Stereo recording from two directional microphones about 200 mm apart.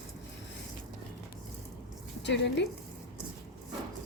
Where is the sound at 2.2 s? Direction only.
60° left (ahead or behind).